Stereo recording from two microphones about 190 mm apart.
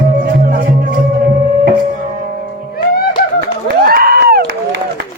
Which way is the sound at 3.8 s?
55° right (ahead or behind).